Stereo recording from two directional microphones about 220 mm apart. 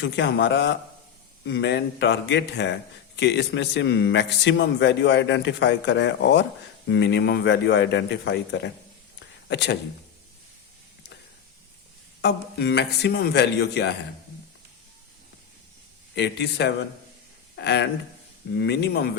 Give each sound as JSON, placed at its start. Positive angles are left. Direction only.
{"t": 0.0, "sound": "a man's voice", "side_deg": 55}
{"t": 9.1, "sound": "a sound", "side_deg": 55}
{"t": 12.2, "sound": "a man's voice", "side_deg": 50}
{"t": 16.1, "sound": "a man's voice", "side_deg": 50}